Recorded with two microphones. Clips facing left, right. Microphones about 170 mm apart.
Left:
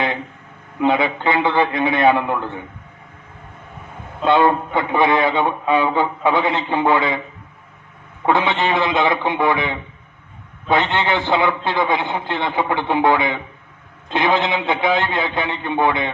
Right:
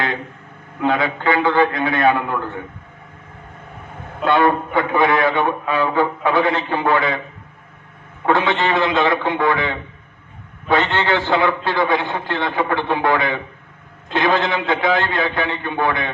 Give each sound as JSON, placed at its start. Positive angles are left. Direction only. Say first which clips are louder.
{"t": 0.9, "sound": "a man's voice", "louder": "even", "side_deg": 20}
{"t": 4.2, "sound": "a man's voice", "louder": "left 1 dB", "side_deg": 20}
{"t": 8.3, "sound": "a man's voice", "louder": "even", "side_deg": 20}